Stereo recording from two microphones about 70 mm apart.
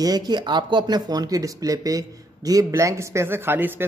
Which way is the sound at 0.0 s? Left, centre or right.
Right.